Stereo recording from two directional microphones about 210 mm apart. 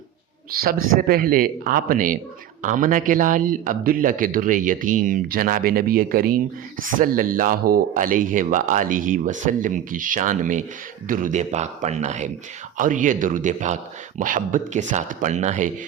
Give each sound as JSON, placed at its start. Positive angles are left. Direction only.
{"t": 0.5, "sound": "speech", "side_deg": -45}